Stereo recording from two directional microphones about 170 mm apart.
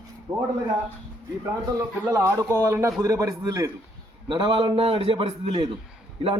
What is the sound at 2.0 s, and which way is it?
A man's voice, 15° right (ahead or behind).